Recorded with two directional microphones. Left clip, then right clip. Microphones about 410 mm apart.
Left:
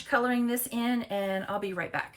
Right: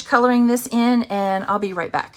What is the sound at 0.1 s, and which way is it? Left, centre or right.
A woman's voice, centre.